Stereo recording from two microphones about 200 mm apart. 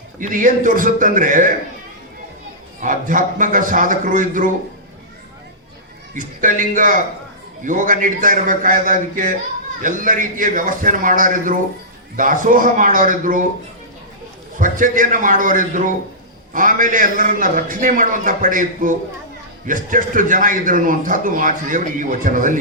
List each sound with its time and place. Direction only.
0.2 s a man's voice: 40° right (ahead or behind)
2.8 s a man's voice: 40° right (ahead or behind)
6.1 s a man's voice: 40° right (ahead or behind)
14.5 s a man's voice: 40° right (ahead or behind)